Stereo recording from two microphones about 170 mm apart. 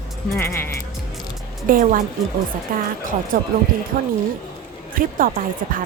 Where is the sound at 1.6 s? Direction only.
55° right (ahead or behind).